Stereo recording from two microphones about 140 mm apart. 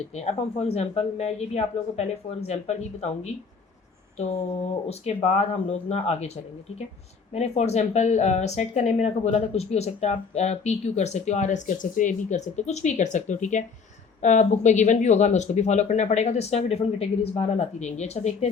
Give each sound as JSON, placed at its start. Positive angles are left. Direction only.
{"t": 0.1, "sound": "speech", "side_deg": 50}